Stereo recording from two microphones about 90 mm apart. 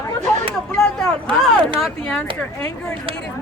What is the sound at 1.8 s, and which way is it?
Speech, 10° left (ahead or behind).